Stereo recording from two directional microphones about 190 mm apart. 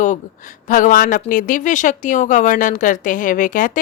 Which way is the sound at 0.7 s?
45° left (ahead or behind).